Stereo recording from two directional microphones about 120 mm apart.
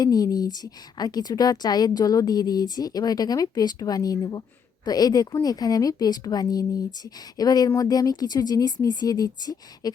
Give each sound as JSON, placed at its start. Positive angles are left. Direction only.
{"t": 0.0, "sound": "a woman's voice", "side_deg": 30}